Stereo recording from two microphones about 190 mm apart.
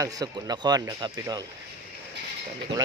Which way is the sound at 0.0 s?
20° right (ahead or behind).